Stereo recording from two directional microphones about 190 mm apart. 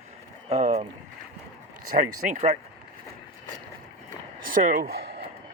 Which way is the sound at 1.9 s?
40° right (ahead or behind).